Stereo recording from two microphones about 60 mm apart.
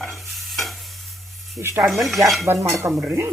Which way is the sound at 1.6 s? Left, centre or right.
Right.